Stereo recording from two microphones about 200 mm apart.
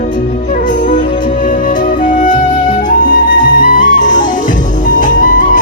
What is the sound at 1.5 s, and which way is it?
Music, 45° left (ahead or behind).